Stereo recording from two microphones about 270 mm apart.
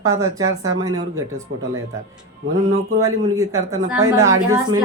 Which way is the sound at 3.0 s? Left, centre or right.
Centre.